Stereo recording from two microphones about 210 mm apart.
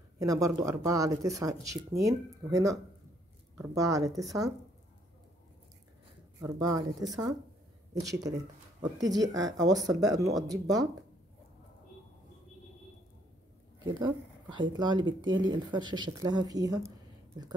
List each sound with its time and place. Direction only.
0.2 s speech: 15° right (ahead or behind)
6.4 s speech: 15° right (ahead or behind)
13.9 s speech: 20° right (ahead or behind)